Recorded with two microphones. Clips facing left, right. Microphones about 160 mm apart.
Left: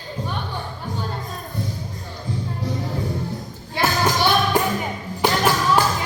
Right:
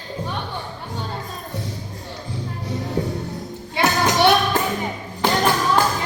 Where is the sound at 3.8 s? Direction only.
65° right (ahead or behind).